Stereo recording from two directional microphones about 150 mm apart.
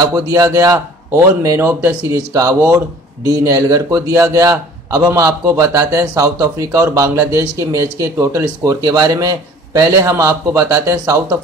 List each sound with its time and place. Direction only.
0.0 s a man's voice: 25° right (ahead or behind)